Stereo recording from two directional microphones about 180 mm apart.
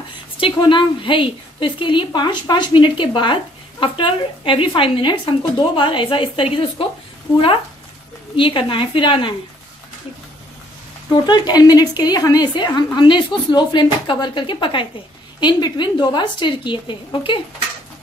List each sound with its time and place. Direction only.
0.4 s a woman's voice: 25° left (ahead or behind)
8.4 s a woman's voice: 30° left (ahead or behind)
11.2 s a woman's voice: 25° left (ahead or behind)